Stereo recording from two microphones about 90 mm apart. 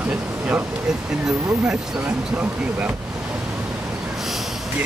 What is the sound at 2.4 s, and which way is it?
Speech, 15° right (ahead or behind).